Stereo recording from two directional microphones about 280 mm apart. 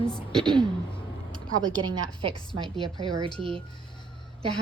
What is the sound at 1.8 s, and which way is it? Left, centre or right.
Speech, right.